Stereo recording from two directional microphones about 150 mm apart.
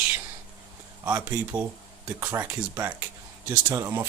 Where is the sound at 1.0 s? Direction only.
10° right (ahead or behind).